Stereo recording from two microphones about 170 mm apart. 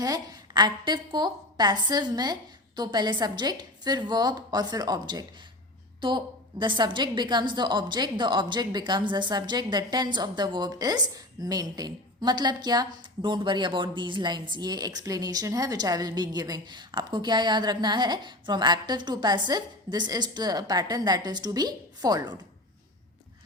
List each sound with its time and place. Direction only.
0.0 s a woman's voice: 25° right (ahead or behind)